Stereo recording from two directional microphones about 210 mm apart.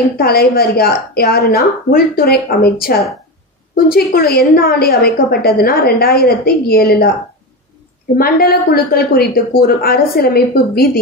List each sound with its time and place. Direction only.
0.2 s a woman's voice: 45° left (ahead or behind)
8.2 s a woman's voice: 45° left (ahead or behind)